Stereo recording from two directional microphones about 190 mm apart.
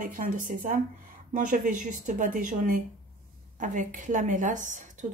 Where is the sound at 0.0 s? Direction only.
45° right (ahead or behind).